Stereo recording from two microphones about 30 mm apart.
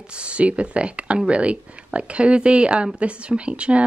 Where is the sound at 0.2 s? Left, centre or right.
Right.